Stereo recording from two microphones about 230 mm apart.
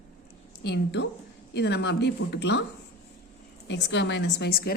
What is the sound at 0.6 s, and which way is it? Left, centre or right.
A woman's voice, left.